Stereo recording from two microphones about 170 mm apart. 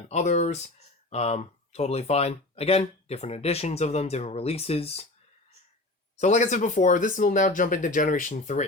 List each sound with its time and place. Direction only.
0.1 s speech: 45° left (ahead or behind)
6.1 s speech: 45° left (ahead or behind)